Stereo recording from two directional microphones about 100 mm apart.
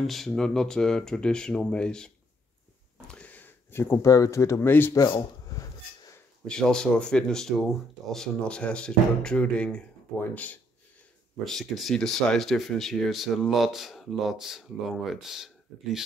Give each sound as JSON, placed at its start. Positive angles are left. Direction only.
{"t": 0.0, "sound": "speech", "side_deg": 0}
{"t": 4.9, "sound": "a sound", "side_deg": 40}
{"t": 6.4, "sound": "speech", "side_deg": 10}
{"t": 11.4, "sound": "speech", "side_deg": 0}